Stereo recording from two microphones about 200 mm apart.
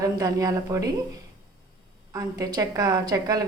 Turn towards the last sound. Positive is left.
turn(degrees=-20)  # may be behind; listen again after turning